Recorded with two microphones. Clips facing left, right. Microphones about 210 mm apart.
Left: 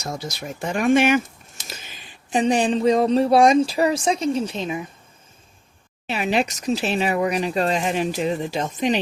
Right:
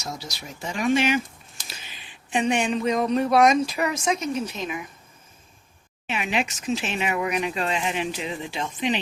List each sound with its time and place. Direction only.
0.0 s speech: 50° left (ahead or behind); by 4.9 s 30° left (ahead or behind)
6.1 s speech: 35° left (ahead or behind)